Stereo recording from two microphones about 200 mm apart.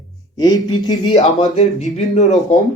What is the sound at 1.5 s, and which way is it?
Speech, 35° left (ahead or behind).